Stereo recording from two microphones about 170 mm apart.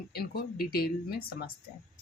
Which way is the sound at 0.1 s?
65° left (ahead or behind).